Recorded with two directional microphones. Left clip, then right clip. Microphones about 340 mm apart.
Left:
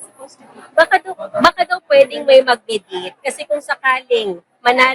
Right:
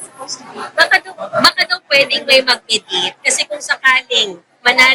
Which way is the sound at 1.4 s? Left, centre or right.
Centre.